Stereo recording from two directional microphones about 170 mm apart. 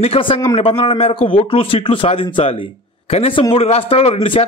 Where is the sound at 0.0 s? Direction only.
35° left (ahead or behind).